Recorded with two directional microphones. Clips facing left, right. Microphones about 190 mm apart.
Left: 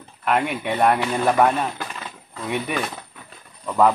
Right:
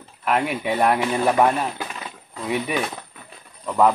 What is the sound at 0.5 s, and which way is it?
Speech, 5° right (ahead or behind).